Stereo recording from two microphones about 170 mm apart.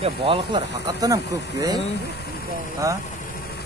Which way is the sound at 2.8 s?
20° right (ahead or behind).